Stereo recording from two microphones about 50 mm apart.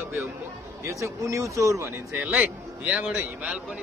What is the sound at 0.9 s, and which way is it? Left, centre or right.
Speech, right.